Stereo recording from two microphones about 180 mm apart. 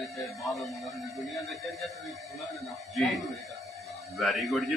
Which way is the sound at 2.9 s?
Centre (ahead or behind).